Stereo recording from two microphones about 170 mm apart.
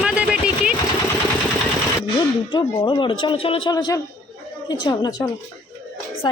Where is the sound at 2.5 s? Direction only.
25° left (ahead or behind).